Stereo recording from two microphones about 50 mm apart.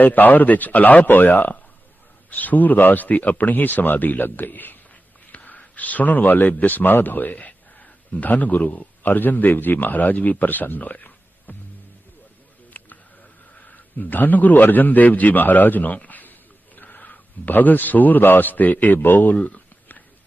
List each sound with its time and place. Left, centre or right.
0.0 s speech: left
12.7 s a sound: left
14.0 s a man's voice: left